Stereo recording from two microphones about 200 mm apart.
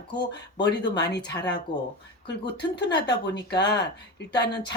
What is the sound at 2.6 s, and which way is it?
Speech, 60° left (ahead or behind).